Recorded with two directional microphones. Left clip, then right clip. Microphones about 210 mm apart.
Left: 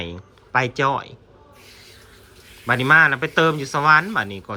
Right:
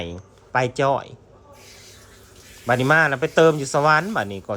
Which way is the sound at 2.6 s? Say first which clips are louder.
Left 3 dB; 15° right (ahead or behind).